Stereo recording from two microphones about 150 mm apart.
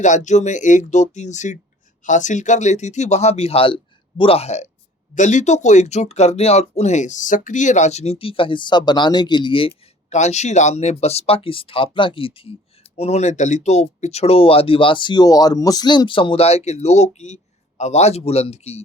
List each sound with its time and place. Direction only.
0.0 s speech: 55° left (ahead or behind); by 9.7 s 35° left (ahead or behind)
10.1 s speech: 50° left (ahead or behind)